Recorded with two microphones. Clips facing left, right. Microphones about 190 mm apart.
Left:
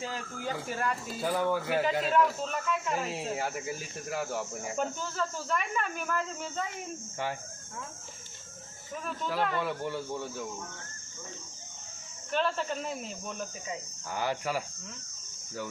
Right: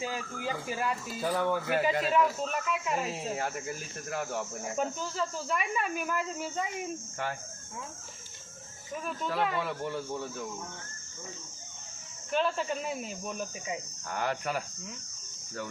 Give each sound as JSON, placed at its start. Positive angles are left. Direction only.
{"t": 0.0, "sound": "a man's voice", "side_deg": -5}
{"t": 1.3, "sound": "a man's voice", "side_deg": 10}
{"t": 9.0, "sound": "a man's voice", "side_deg": 0}
{"t": 12.3, "sound": "a man's voice", "side_deg": -5}
{"t": 14.1, "sound": "a man's voice", "side_deg": 5}